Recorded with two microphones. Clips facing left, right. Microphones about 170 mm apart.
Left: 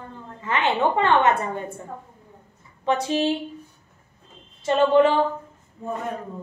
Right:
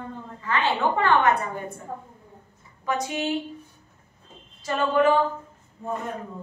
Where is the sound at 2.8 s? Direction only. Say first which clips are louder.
Left 5 dB; 30° left (ahead or behind).